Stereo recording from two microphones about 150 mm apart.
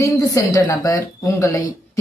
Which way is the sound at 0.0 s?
20° left (ahead or behind).